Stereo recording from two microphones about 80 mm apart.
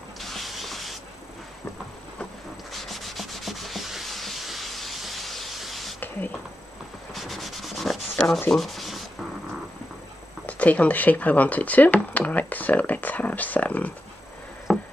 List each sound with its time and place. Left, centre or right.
0.2 s a sound: centre
2.7 s sanding: centre
7.2 s sanding: centre
10.4 s speech: centre
14.7 s insect: centre